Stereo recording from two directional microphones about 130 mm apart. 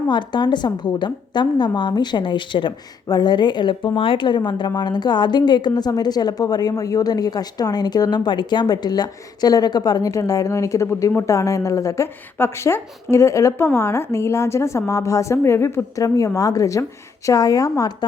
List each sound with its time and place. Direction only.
0.1 s a woman's voice: 35° left (ahead or behind)